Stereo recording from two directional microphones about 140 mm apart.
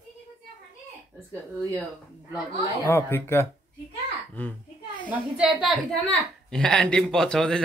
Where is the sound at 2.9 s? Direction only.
15° left (ahead or behind).